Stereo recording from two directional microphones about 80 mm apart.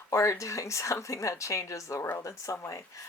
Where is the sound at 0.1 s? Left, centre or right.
Left.